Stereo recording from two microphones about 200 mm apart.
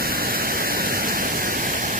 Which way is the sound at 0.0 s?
45° right (ahead or behind).